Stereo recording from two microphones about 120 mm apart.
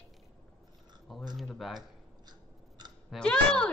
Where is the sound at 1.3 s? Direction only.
Centre (ahead or behind).